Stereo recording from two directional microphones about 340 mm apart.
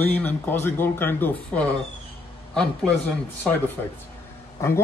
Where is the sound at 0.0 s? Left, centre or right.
Centre.